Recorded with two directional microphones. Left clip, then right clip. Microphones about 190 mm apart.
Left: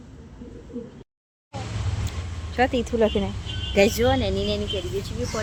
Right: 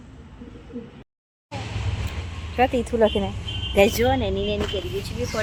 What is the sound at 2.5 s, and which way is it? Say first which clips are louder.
Speech: right 2 dB; 10° left (ahead or behind).